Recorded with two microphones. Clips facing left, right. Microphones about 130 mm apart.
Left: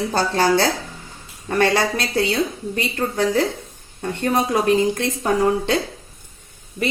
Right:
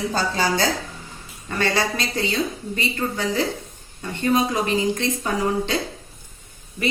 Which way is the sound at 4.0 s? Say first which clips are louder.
Even; 60° left (ahead or behind).